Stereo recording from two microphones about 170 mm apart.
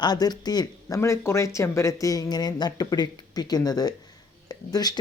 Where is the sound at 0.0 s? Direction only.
25° left (ahead or behind).